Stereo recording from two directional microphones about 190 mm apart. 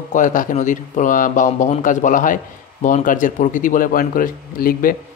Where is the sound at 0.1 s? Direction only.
45° left (ahead or behind).